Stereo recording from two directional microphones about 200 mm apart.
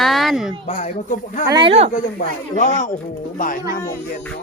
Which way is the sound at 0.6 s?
35° left (ahead or behind).